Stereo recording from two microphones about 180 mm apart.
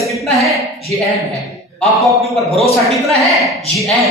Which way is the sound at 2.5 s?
35° left (ahead or behind).